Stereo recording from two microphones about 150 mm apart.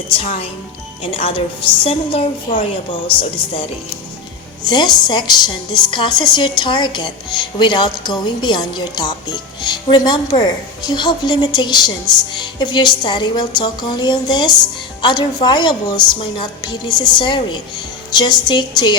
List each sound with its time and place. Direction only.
0.1 s a woman's voice: 45° left (ahead or behind); by 18.9 s 30° left (ahead or behind)